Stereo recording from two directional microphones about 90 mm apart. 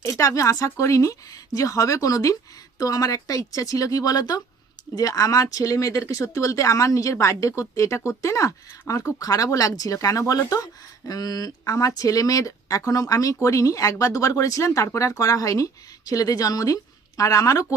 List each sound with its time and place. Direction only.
0.0 s speech: 35° left (ahead or behind)